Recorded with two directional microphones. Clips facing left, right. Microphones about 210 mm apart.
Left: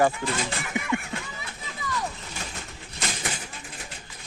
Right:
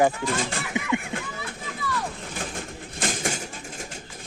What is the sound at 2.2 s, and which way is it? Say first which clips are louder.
Bird: right 5 dB; 50° right (ahead or behind).